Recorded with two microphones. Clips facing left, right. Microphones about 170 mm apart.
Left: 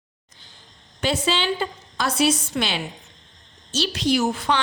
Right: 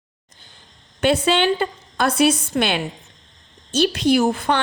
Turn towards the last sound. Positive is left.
turn(degrees=-55)  # may be behind; listen again after turning